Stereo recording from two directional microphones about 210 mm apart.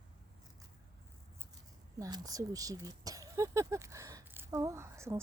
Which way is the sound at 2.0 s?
20° right (ahead or behind).